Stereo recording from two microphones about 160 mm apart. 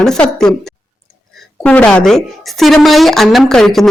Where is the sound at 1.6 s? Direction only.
10° left (ahead or behind).